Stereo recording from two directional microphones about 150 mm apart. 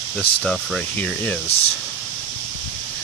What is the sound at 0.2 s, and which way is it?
Speech, 5° left (ahead or behind).